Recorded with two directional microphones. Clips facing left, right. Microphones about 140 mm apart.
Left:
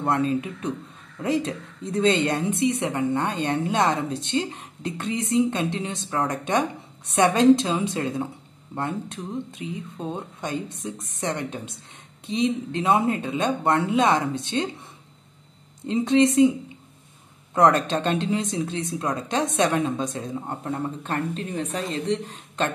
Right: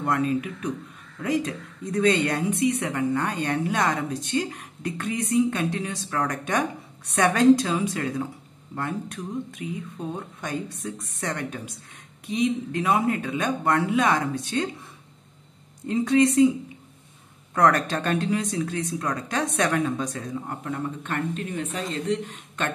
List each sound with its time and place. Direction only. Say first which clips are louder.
0.0 s speech: left 1 dB; 30° left (ahead or behind)
15.9 s speech: left 1 dB; 25° left (ahead or behind)
17.6 s speech: left 2 dB; 20° left (ahead or behind)